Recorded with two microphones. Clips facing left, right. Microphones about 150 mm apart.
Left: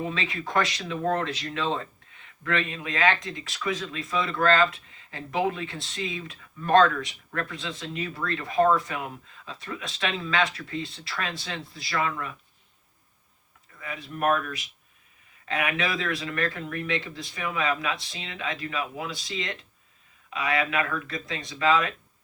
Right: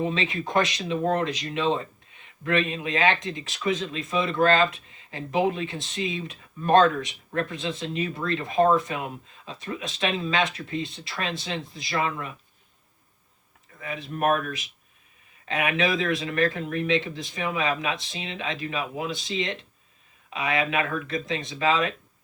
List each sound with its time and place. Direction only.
0.0 s speech: 20° right (ahead or behind)
13.7 s speech: 25° right (ahead or behind)